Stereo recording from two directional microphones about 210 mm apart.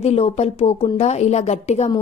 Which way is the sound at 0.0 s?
30° left (ahead or behind).